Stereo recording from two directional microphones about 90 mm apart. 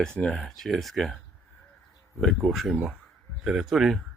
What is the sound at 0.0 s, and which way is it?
Speech, 10° left (ahead or behind).